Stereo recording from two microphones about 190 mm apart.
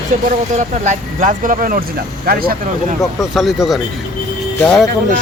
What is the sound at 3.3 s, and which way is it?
Speech, centre (ahead or behind).